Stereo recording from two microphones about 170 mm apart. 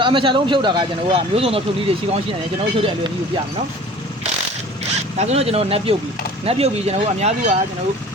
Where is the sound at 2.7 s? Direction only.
30° right (ahead or behind).